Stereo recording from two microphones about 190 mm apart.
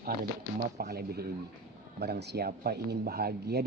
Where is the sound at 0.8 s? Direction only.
55° right (ahead or behind).